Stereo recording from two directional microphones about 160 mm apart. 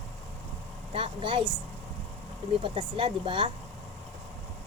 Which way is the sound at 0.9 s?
35° right (ahead or behind).